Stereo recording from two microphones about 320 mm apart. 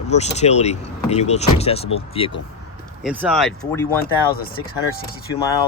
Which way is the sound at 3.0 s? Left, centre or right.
Centre.